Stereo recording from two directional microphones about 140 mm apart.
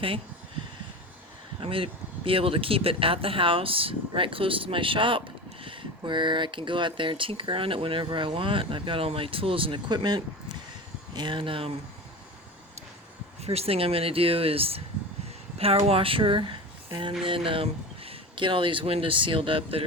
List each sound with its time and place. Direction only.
1.6 s speech: 40° right (ahead or behind)
13.4 s speech: 45° right (ahead or behind)